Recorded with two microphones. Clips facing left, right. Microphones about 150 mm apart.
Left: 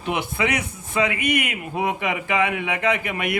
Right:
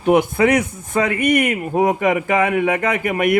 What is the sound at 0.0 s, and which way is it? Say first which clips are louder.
A man's voice: right 10 dB; 45° right (ahead or behind).